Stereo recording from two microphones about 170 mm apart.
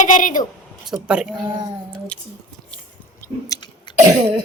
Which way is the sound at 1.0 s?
5° right (ahead or behind).